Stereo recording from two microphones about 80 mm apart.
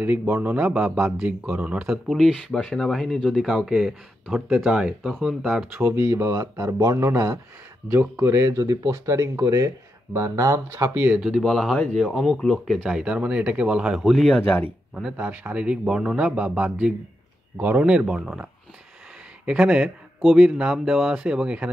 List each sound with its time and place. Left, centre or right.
0.0 s speech: right
2.0 s speech: centre
5.8 s speech: right
7.9 s speech: right
11.1 s speech: centre
11.4 s speech: centre
15.1 s speech: right